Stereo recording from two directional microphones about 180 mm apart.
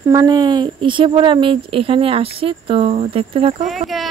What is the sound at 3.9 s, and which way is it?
Speech, centre (ahead or behind).